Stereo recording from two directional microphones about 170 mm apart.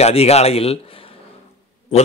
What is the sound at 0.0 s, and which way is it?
A man's voice, 35° left (ahead or behind).